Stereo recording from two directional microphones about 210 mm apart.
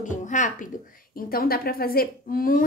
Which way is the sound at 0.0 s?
35° left (ahead or behind).